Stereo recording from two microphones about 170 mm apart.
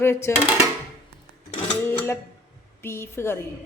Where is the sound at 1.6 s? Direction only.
10° left (ahead or behind).